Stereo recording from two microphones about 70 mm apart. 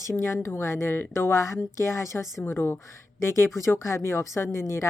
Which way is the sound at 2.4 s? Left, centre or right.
Left.